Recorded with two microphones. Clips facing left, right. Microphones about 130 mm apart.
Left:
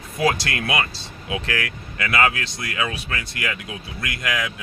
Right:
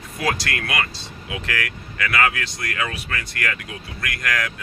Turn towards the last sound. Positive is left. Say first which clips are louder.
# even
turn(degrees=5)  # may be behind; listen again after turning